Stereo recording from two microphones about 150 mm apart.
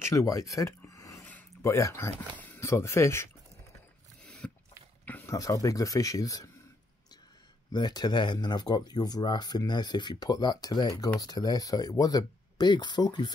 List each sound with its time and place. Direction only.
0.0 s speech: 20° left (ahead or behind)
4.2 s a sound: 5° left (ahead or behind)
5.3 s speech: 25° left (ahead or behind)
7.7 s speech: 30° left (ahead or behind)